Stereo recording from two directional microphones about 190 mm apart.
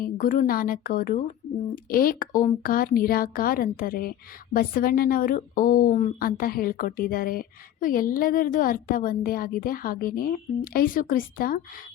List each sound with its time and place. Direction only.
0.0 s speech: 45° left (ahead or behind)